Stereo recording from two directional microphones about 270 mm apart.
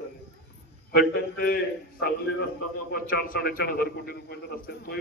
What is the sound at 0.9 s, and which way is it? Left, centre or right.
A man's voice, left.